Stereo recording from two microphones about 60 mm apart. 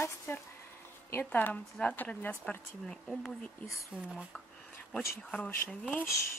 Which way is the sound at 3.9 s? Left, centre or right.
Right.